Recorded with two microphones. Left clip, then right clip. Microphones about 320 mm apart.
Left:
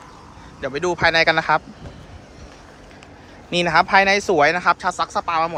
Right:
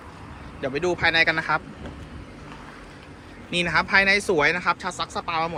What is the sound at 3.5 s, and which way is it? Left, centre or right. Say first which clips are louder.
Speech: left 6 dB; centre.